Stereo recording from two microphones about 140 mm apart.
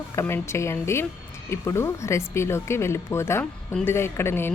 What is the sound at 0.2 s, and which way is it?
A woman's voice, 20° left (ahead or behind).